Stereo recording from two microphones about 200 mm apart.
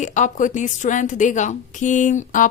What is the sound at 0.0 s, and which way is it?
Speech, 40° left (ahead or behind).